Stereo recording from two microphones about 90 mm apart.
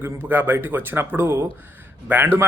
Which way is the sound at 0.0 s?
25° right (ahead or behind).